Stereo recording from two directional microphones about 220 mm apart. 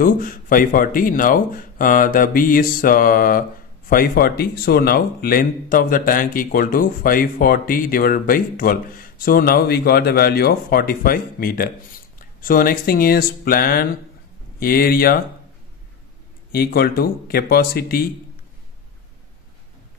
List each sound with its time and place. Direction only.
0.0 s speech: 40° left (ahead or behind)
16.5 s speech: 45° left (ahead or behind)